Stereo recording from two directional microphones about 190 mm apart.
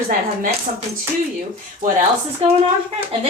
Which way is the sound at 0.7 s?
40° right (ahead or behind).